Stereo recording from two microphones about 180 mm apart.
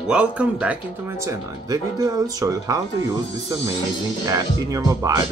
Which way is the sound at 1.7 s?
20° right (ahead or behind).